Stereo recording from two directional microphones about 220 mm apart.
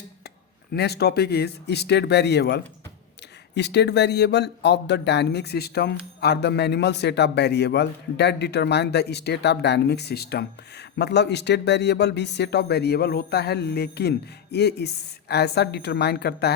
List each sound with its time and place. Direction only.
0.7 s speech: 45° left (ahead or behind)